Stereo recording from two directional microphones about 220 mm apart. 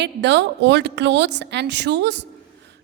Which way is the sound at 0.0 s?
50° right (ahead or behind).